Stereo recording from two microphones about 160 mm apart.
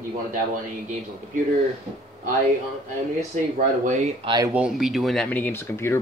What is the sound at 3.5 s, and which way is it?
Speech, 50° right (ahead or behind).